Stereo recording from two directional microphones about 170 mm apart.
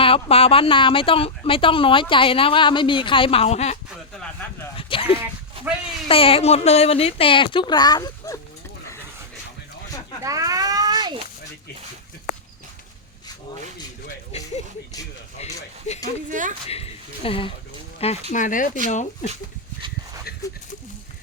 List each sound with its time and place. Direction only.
0.0 s speech: 35° left (ahead or behind)
4.2 s speech: 10° left (ahead or behind)
4.8 s dog: 30° left (ahead or behind)
6.1 s speech: 35° left (ahead or behind)
10.2 s a sound: 20° right (ahead or behind)
14.3 s music: 40° left (ahead or behind)
15.4 s a sound: 40° left (ahead or behind)
16.3 s speech: 50° right (ahead or behind)
16.6 s a sound: 35° left (ahead or behind)
18.0 s speech: 40° left (ahead or behind)